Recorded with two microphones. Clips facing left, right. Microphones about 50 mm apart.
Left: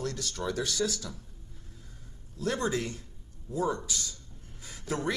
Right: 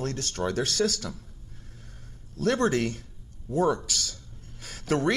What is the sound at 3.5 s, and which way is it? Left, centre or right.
Speech, right.